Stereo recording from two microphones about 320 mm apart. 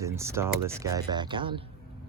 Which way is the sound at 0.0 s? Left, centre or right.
Centre.